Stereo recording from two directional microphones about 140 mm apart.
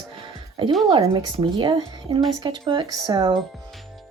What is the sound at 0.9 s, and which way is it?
Speech, 30° right (ahead or behind).